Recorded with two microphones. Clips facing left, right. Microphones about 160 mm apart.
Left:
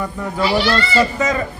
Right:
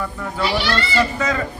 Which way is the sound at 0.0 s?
20° left (ahead or behind).